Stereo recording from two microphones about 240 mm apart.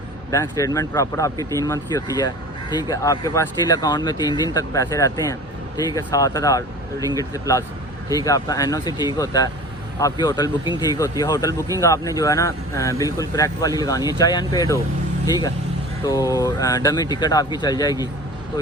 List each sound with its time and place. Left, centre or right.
0.3 s speech: centre
16.0 s speech: centre